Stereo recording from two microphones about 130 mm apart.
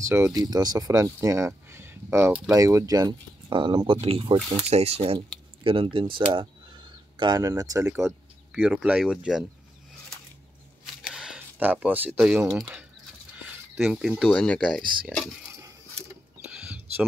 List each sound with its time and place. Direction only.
0.0 s speech: 20° right (ahead or behind); by 6.4 s 40° right (ahead or behind)
7.2 s speech: 30° right (ahead or behind)
8.5 s speech: 5° right (ahead or behind)
11.0 s a sound: 5° right (ahead or behind)
13.7 s speech: centre (ahead or behind)
14.3 s speech: 10° left (ahead or behind)
16.5 s a sound: 5° right (ahead or behind)